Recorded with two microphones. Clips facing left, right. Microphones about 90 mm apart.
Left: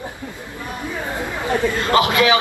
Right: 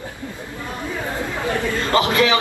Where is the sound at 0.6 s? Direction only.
20° left (ahead or behind).